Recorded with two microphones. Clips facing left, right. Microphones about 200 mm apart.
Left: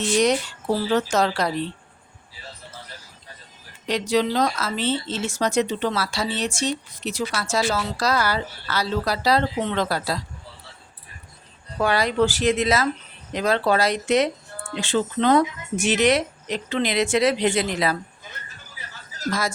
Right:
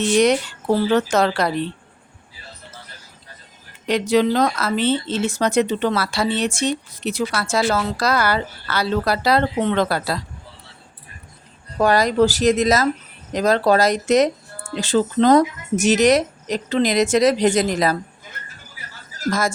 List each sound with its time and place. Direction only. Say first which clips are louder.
0.9 s speech: right 1 dB; 60° right (ahead or behind)
3.8 s speech: right 4 dB; 55° right (ahead or behind)
11.8 s speech: right 4 dB; 40° right (ahead or behind)